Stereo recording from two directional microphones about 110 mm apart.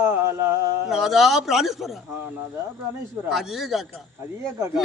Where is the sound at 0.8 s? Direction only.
5° right (ahead or behind).